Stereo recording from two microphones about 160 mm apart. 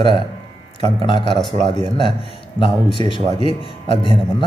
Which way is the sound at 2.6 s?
30° left (ahead or behind).